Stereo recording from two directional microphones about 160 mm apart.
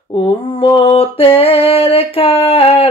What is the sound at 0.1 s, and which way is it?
Mantra, 35° left (ahead or behind).